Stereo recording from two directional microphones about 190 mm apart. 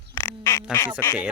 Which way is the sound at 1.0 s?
10° left (ahead or behind).